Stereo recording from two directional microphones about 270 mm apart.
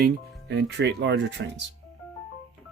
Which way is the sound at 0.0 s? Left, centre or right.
Right.